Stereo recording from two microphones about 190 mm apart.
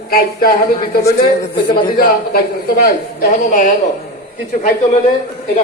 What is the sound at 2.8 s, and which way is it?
Speech, 50° left (ahead or behind).